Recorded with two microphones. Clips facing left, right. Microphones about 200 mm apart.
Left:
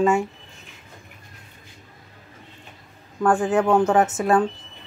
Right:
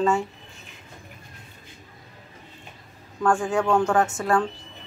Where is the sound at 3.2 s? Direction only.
20° left (ahead or behind).